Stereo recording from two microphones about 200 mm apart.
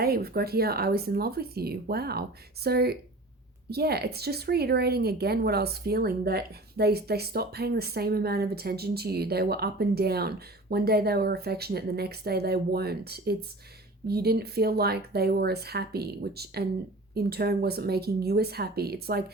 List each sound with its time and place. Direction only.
0.0 s speech: 50° right (ahead or behind)